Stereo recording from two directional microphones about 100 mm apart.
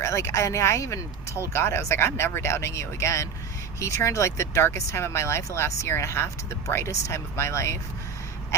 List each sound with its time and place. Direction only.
0.0 s speech: 30° left (ahead or behind)